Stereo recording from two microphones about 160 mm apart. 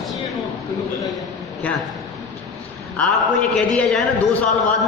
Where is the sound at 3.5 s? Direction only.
5° left (ahead or behind).